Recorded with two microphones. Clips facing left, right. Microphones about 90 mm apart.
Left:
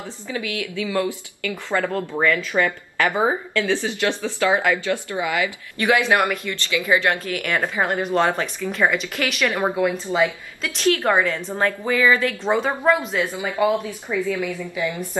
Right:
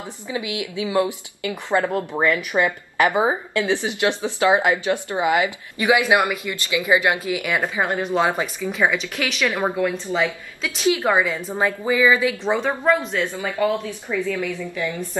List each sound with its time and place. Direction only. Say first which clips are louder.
0.0 s a woman's voice: right 1 dB; 20° right (ahead or behind)
5.8 s speech: right 1 dB; 10° right (ahead or behind)
10.9 s speech: even; 10° right (ahead or behind); by 15.0 s 15° left (ahead or behind)